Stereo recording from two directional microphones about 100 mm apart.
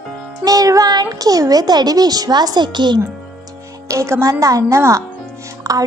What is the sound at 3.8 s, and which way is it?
A child's voice, 30° right (ahead or behind).